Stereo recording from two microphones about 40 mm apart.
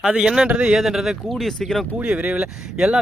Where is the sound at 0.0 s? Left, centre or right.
Centre.